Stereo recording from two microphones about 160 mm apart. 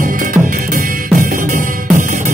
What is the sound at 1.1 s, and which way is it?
Music, 55° right (ahead or behind).